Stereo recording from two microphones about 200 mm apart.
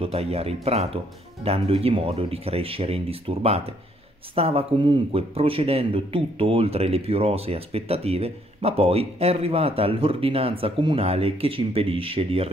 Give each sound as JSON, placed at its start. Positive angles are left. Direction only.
{"t": 0.0, "sound": "speech", "side_deg": -30}